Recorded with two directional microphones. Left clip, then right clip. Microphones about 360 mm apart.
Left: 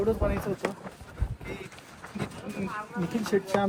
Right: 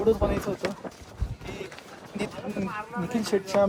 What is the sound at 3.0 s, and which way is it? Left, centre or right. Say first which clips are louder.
Speech: right 1 dB; centre.